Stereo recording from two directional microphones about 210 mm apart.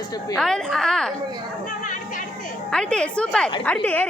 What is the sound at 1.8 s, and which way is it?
Speech, 40° left (ahead or behind).